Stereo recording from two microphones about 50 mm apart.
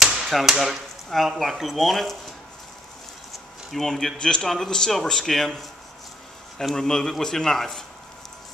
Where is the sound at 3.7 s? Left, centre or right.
Centre.